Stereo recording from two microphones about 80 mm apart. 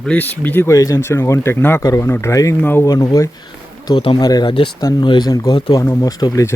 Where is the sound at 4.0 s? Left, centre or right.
Left.